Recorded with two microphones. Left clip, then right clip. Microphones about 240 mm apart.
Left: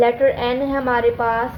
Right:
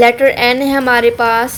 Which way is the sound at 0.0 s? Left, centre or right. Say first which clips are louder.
Right 7 dB; right.